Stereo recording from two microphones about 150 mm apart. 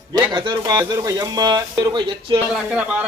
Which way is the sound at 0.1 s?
30° right (ahead or behind).